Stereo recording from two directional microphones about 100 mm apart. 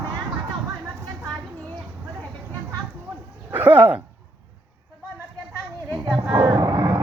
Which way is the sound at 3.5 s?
15° right (ahead or behind).